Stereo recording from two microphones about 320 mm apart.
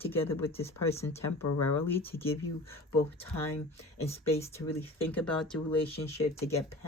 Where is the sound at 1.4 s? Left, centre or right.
Left.